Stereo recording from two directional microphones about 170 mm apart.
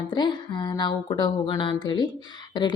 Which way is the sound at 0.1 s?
25° left (ahead or behind).